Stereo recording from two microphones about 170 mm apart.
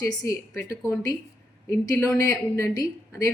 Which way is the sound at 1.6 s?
15° left (ahead or behind).